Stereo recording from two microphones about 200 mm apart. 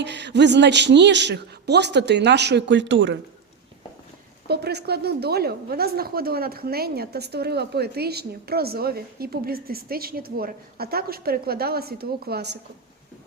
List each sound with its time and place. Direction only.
0.0 s a man's voice: 60° right (ahead or behind)
4.4 s a woman's voice: 55° right (ahead or behind)